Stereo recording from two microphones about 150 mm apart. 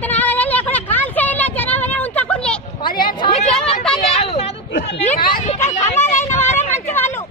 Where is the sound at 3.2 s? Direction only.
45° left (ahead or behind).